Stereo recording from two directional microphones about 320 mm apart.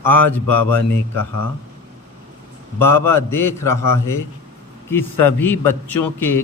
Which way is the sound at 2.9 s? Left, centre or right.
Centre.